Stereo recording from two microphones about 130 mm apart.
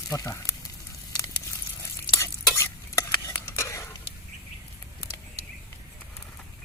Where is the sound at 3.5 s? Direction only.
20° left (ahead or behind).